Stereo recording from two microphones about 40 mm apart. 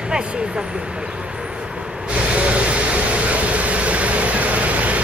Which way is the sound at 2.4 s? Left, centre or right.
Right.